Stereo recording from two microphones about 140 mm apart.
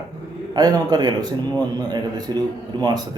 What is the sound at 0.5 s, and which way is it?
Speech, 30° right (ahead or behind).